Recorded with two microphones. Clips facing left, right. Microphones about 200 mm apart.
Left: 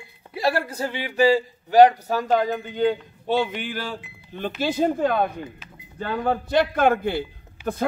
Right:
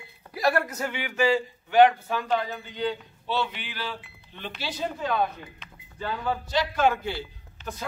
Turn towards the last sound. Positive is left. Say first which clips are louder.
# left 10 dB
turn(degrees=10)  # may be behind; listen again after turning